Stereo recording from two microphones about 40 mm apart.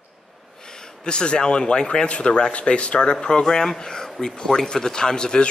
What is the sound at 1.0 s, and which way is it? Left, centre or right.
A man's voice, left.